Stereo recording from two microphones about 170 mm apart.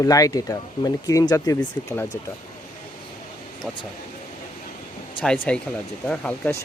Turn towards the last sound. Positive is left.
turn(degrees=10)  # may be behind; listen again after turning